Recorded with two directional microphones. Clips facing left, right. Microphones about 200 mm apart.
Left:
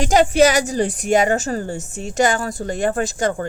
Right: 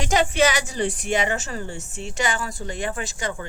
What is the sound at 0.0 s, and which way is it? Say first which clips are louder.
A woman's voice: left 6 dB; 40° left (ahead or behind).